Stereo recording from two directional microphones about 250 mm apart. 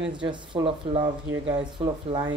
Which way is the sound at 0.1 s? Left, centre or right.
Centre.